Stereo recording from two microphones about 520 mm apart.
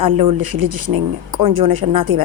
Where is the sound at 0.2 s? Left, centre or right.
Right.